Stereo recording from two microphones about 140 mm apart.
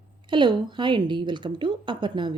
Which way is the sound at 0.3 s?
35° right (ahead or behind).